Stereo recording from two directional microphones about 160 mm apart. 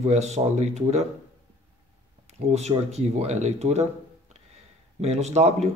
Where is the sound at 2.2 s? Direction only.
45° right (ahead or behind).